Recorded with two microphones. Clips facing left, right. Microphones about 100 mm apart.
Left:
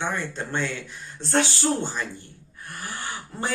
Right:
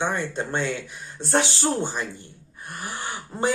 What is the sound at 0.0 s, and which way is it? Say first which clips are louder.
Speech: right 3 dB; 20° right (ahead or behind).